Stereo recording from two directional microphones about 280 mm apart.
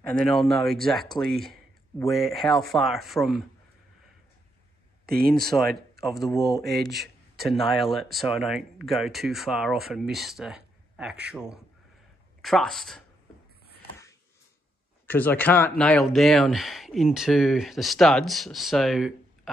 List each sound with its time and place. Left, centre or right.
0.0 s speech: centre
5.0 s speech: right
5.5 s speech: centre
6.0 s speech: centre
6.3 s speech: centre
6.8 s speech: centre
15.0 s speech: centre